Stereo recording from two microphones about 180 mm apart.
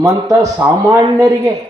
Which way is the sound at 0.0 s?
20° right (ahead or behind).